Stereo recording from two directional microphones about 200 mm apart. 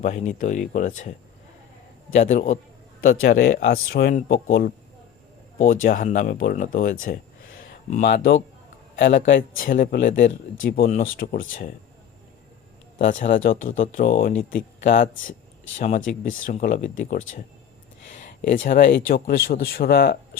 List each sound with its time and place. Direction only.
0.0 s speech: 35° left (ahead or behind)
2.1 s speech: 35° left (ahead or behind)
5.8 s speech: 40° left (ahead or behind)
7.6 s a sound: 35° left (ahead or behind)
8.0 s speech: 60° left (ahead or behind)
9.6 s speech: 40° left (ahead or behind)
13.0 s speech: 40° left (ahead or behind)
16.2 s speech: 40° left (ahead or behind)
18.1 s a sound: 35° left (ahead or behind)
18.9 s speech: 55° left (ahead or behind)